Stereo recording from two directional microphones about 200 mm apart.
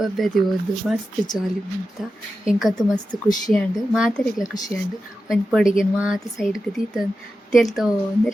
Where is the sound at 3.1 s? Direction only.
20° right (ahead or behind).